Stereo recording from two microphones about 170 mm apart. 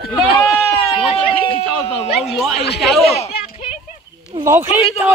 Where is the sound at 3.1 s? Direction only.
35° left (ahead or behind).